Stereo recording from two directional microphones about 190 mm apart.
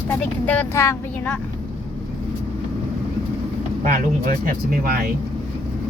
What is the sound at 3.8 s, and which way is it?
Speech, 45° right (ahead or behind).